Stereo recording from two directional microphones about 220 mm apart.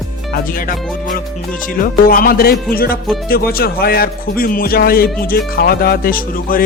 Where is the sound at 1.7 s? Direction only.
40° left (ahead or behind).